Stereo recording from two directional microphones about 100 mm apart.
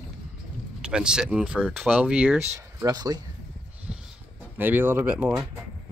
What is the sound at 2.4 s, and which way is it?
Speech, 35° right (ahead or behind).